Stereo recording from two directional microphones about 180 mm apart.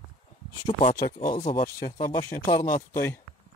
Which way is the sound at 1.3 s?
35° left (ahead or behind).